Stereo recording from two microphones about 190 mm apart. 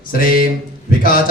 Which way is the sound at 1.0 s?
50° left (ahead or behind).